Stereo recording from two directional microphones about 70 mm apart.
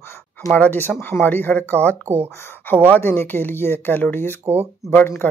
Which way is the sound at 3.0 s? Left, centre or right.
Left.